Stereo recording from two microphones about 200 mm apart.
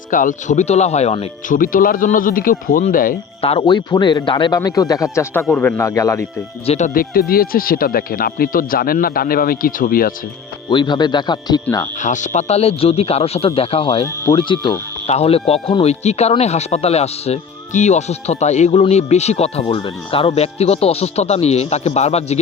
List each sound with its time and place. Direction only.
0.1 s speech: 40° left (ahead or behind)
3.4 s speech: 25° left (ahead or behind)
6.7 s speech: 35° left (ahead or behind)
10.7 s speech: 25° left (ahead or behind)
11.9 s speech: 40° left (ahead or behind)